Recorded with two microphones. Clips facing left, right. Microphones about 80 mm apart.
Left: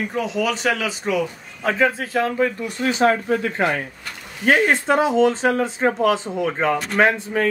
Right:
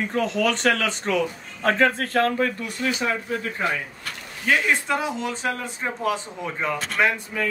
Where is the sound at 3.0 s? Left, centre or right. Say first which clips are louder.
Left 8 dB; left.